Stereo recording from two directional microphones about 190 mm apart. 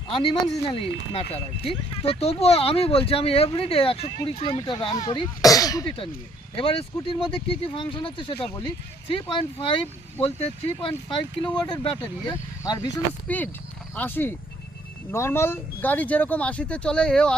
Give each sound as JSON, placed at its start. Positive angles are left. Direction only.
{"t": 0.1, "sound": "speech", "side_deg": 25}
{"t": 13.2, "sound": "speech", "side_deg": 10}